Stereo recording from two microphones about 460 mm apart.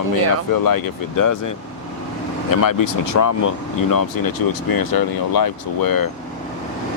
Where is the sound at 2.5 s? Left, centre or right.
Left.